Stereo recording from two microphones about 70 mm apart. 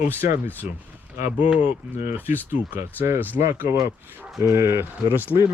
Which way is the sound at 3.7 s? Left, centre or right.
Right.